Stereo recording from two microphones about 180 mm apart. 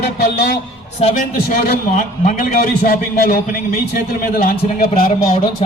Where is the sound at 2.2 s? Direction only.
50° left (ahead or behind).